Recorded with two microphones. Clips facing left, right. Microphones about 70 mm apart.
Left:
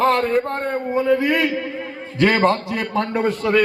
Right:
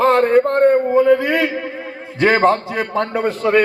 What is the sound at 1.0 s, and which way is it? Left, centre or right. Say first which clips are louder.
Speech: right 1 dB; right.